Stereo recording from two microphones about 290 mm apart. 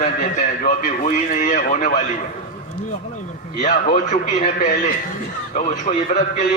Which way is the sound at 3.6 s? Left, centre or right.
Left.